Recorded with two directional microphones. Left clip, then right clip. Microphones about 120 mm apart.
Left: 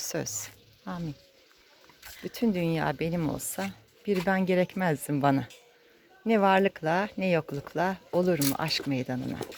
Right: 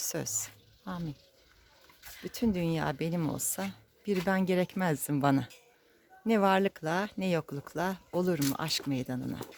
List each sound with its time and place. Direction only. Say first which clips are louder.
0.0 s speech: left 2 dB; 30° right (ahead or behind)
2.2 s speech: left 3 dB; 30° right (ahead or behind)